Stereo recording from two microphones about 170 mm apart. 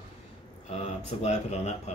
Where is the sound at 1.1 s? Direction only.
40° left (ahead or behind).